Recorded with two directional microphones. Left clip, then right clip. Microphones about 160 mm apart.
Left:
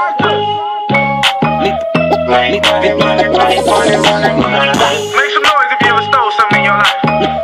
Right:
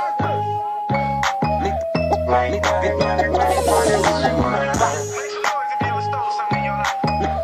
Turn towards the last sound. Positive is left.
turn(degrees=70)  # may be behind; listen again after turning